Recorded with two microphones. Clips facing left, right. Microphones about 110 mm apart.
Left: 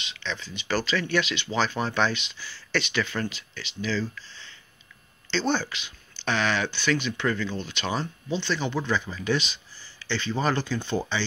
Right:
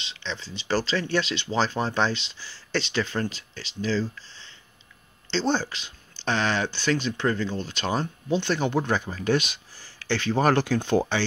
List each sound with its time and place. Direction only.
0.0 s speech: 25° right (ahead or behind); by 11.0 s 75° right (ahead or behind)